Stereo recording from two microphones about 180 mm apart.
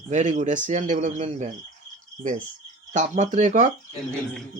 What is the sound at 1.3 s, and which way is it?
Cricket, 40° right (ahead or behind).